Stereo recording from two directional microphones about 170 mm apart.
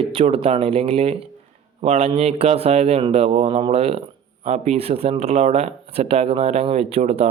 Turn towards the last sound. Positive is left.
turn(degrees=-40)  # may be behind; listen again after turning